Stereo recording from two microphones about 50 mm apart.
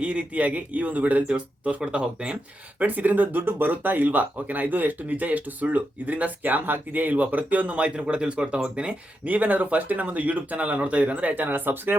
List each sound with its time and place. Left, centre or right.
0.0 s speech: right
2.8 s speech: right